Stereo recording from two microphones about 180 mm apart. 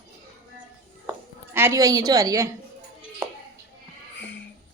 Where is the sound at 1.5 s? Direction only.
15° right (ahead or behind).